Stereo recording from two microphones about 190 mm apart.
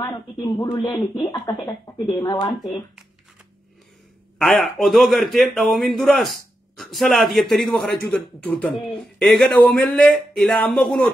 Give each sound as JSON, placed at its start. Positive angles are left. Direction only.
{"t": 0.0, "sound": "speech", "side_deg": 15}
{"t": 4.4, "sound": "a man's voice", "side_deg": 0}